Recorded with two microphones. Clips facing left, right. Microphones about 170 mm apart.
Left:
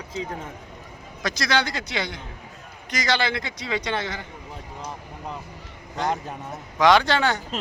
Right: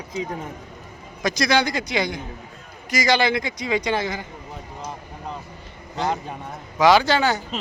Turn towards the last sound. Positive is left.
turn(degrees=-5)  # may be behind; listen again after turning